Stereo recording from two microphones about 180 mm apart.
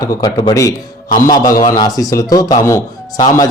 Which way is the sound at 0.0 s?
20° left (ahead or behind).